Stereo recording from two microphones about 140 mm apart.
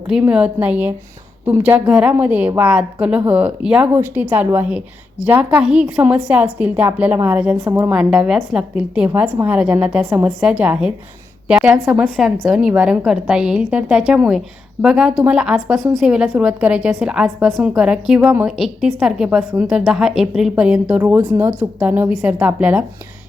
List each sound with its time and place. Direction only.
0.1 s a woman's voice: 10° right (ahead or behind)